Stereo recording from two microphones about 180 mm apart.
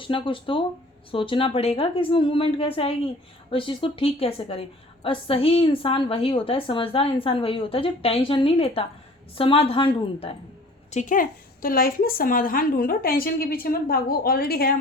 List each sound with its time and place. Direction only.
0.0 s a woman's voice: 30° left (ahead or behind)
10.9 s a woman's voice: 45° left (ahead or behind)